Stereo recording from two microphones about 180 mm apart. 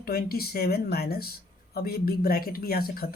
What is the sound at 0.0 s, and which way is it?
Speech, 60° left (ahead or behind).